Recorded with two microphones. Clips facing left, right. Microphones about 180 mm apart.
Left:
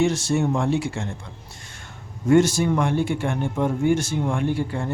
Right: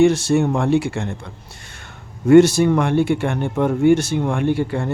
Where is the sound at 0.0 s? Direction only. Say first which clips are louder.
Right 6 dB; 65° right (ahead or behind).